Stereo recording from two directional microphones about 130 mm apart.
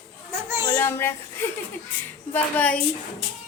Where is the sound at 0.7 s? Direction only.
20° left (ahead or behind).